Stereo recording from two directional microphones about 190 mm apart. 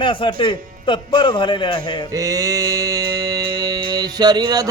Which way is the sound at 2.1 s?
15° right (ahead or behind).